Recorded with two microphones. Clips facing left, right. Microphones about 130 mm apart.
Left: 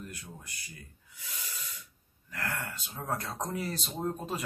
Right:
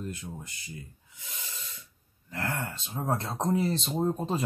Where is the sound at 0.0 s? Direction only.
25° right (ahead or behind).